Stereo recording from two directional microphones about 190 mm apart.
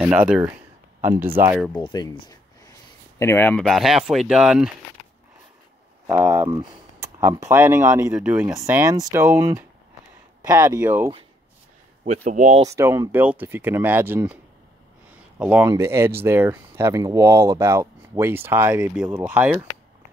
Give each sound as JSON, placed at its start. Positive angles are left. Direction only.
{"t": 0.0, "sound": "speech", "side_deg": -5}
{"t": 1.8, "sound": "speech", "side_deg": 20}
{"t": 3.2, "sound": "speech", "side_deg": 10}
{"t": 6.0, "sound": "speech", "side_deg": -15}
{"t": 12.0, "sound": "speech", "side_deg": -40}
{"t": 12.6, "sound": "speech", "side_deg": -15}